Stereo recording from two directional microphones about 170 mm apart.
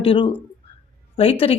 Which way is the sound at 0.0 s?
30° left (ahead or behind).